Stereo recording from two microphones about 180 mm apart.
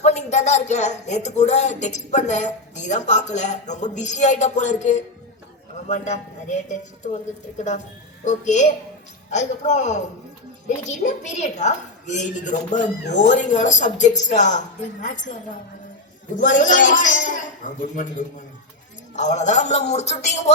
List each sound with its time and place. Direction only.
0.0 s speech: 35° left (ahead or behind)
8.2 s a man's voice: 40° left (ahead or behind)